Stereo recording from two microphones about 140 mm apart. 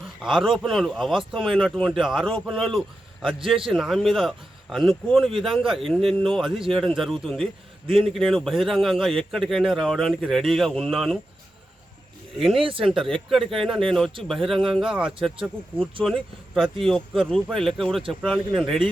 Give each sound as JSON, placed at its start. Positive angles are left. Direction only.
{"t": 0.2, "sound": "speech", "side_deg": 0}
{"t": 12.4, "sound": "speech", "side_deg": 0}